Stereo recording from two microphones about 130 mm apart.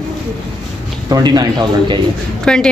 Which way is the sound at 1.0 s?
30° right (ahead or behind).